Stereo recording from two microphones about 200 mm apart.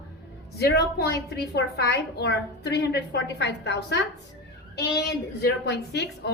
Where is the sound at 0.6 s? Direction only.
55° left (ahead or behind).